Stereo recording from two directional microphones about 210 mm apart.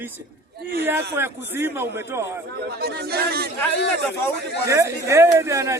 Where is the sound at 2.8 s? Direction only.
50° right (ahead or behind).